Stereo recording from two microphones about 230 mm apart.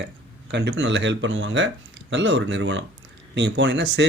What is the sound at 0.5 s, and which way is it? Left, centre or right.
Speech, right.